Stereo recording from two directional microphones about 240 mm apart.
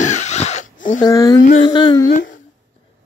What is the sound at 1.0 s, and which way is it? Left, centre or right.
Speech, centre.